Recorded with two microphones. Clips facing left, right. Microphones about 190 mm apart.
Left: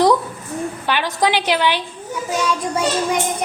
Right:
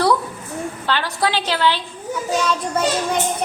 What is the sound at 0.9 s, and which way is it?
A woman's voice, 15° left (ahead or behind).